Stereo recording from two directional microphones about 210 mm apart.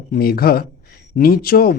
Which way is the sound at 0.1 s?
45° left (ahead or behind).